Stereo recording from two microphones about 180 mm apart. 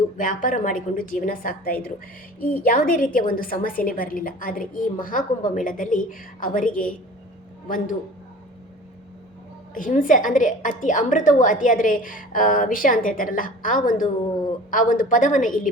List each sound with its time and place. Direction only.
0.2 s a woman's voice: 50° left (ahead or behind)
9.7 s a woman's voice: 50° left (ahead or behind)